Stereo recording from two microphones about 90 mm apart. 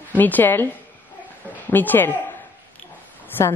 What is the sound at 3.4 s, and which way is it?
Speech, 25° left (ahead or behind).